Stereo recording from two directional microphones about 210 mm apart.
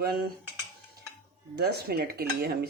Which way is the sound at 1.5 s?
50° right (ahead or behind).